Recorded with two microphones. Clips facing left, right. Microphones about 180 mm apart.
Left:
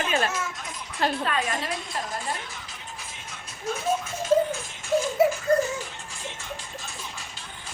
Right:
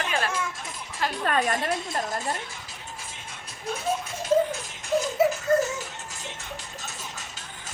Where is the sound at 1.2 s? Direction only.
50° right (ahead or behind).